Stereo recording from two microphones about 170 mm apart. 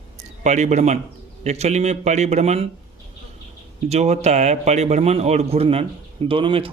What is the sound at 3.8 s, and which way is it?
A man's voice, 40° right (ahead or behind).